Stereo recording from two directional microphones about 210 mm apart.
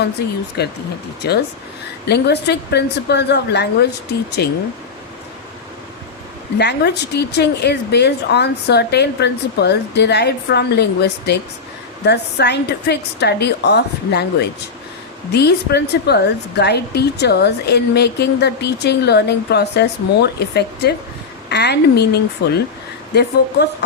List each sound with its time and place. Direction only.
0.0 s a woman's voice: 50° left (ahead or behind)
6.6 s a woman's voice: 55° left (ahead or behind)
15.3 s a woman's voice: 50° left (ahead or behind)